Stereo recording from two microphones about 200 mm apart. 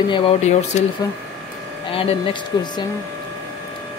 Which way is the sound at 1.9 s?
25° left (ahead or behind).